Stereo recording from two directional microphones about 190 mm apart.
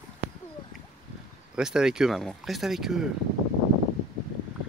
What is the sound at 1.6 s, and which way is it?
Speech, 5° right (ahead or behind).